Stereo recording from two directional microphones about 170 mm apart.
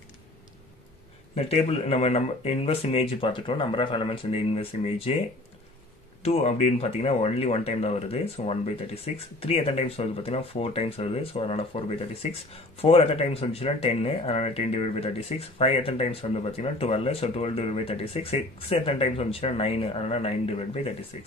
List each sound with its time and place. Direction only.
1.3 s speech: 40° left (ahead or behind)
6.2 s speech: 40° left (ahead or behind)